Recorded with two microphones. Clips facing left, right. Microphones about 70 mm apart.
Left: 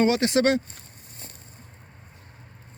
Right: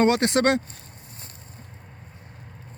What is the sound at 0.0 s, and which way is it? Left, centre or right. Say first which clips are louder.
Speech: right 1 dB; right.